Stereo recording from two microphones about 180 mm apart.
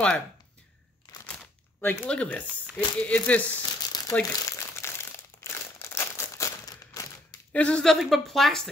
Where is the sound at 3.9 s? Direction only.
20° left (ahead or behind).